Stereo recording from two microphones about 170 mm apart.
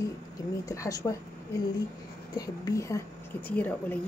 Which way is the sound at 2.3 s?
20° left (ahead or behind).